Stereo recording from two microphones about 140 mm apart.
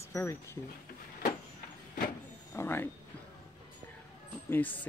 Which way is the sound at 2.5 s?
15° left (ahead or behind).